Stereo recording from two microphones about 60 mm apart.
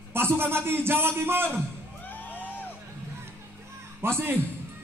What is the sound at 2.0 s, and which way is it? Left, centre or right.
Music, left.